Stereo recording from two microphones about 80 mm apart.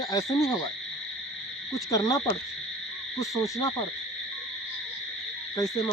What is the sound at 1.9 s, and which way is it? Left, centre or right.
Owl, left.